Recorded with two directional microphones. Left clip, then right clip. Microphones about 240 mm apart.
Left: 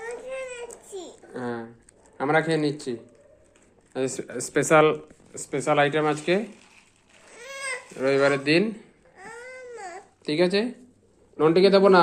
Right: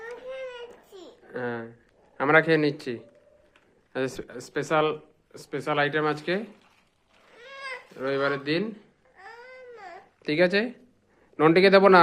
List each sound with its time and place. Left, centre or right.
0.3 s a sound: centre
1.3 s a sound: right
2.1 s a man's voice: right
3.9 s speech: centre
4.3 s speech: centre; by 6.4 s right
7.3 s a sound: left
7.9 s speech: centre
9.4 s baby cry: centre
10.2 s a man's voice: right